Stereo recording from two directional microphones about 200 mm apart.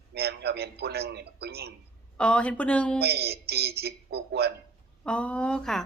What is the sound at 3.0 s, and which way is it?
A man's voice, 55° right (ahead or behind).